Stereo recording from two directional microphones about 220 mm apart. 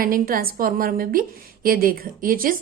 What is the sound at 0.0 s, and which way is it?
A woman's voice, 40° right (ahead or behind).